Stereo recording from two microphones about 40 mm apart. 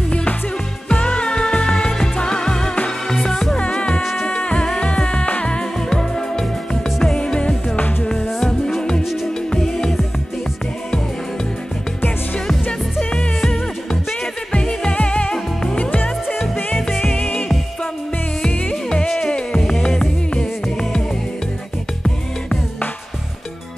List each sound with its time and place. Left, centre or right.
0.1 s music: left; by 3.5 s centre
3.5 s music: left
4.0 s music: centre
4.3 s music: left
8.4 s music: centre
9.0 s music: centre
9.5 s music: centre
13.8 s music: left
14.9 s music: left
15.3 s music: centre
15.8 s music: left
19.0 s music: centre